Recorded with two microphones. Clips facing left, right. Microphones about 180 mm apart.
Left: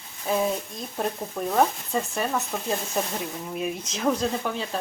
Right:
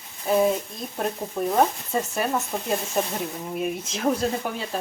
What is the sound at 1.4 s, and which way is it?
Speech, 10° right (ahead or behind).